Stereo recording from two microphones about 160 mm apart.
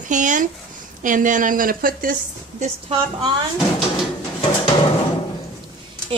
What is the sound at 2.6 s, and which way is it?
Speech, 35° right (ahead or behind).